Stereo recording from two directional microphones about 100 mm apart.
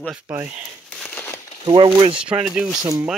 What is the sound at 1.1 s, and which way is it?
Crumpling, 20° left (ahead or behind).